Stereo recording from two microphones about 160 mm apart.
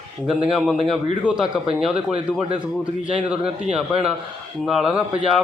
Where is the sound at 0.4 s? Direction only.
Centre (ahead or behind).